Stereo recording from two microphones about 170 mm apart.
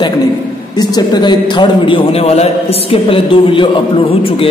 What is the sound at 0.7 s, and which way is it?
A man's voice, 25° left (ahead or behind).